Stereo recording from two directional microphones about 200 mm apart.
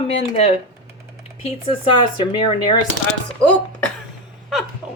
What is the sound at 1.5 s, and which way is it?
Speech, 25° left (ahead or behind).